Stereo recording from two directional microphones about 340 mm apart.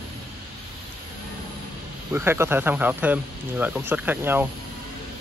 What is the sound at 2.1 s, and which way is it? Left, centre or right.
Speech, centre.